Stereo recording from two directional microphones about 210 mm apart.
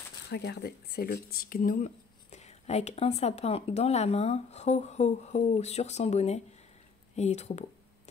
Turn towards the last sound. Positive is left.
turn(degrees=35)  # may be behind; listen again after turning